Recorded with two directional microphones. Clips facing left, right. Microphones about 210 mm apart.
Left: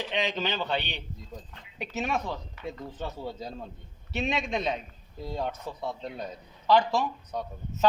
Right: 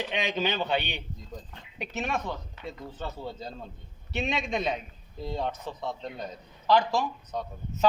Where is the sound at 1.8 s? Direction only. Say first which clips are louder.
Left 1 dB; 5° left (ahead or behind).